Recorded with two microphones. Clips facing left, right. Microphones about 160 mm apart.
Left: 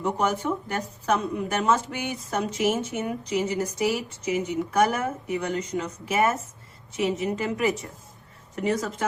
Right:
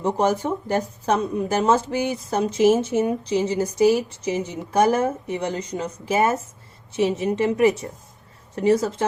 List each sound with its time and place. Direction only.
0.2 s a woman's voice: 35° right (ahead or behind)
5.5 s a woman's voice: 35° right (ahead or behind)